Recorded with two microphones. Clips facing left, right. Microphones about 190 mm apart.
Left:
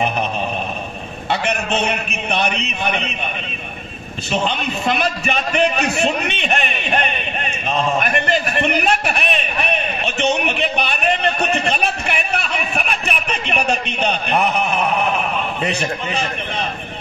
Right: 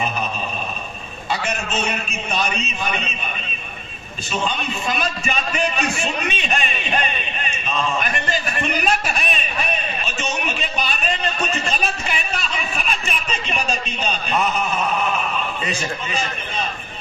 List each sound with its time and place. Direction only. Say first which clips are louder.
1.3 s a man's voice: left 4 dB; 60° left (ahead or behind)
4.3 s a man's voice: left 4 dB; 65° left (ahead or behind)